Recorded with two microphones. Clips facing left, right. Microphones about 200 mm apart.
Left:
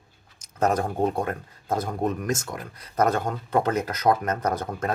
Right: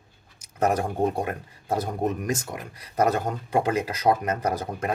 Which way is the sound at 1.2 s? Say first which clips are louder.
Left 1 dB; 15° right (ahead or behind).